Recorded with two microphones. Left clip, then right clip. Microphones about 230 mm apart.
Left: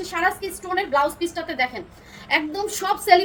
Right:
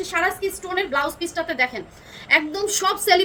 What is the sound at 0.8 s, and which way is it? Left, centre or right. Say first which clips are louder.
A woman's voice: left 2 dB; centre.